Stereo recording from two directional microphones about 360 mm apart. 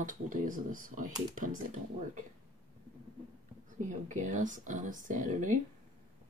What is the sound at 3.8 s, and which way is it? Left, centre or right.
Speech, right.